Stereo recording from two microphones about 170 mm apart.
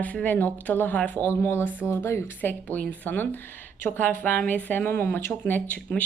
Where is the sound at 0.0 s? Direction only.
10° left (ahead or behind).